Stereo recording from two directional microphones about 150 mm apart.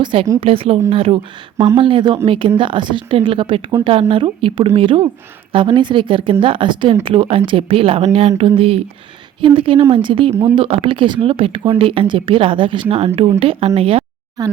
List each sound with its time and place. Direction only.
0.0 s speech: 35° right (ahead or behind)
1.5 s speech: 20° right (ahead or behind)
1.8 s speech: 35° right (ahead or behind)
14.4 s speech: 25° right (ahead or behind)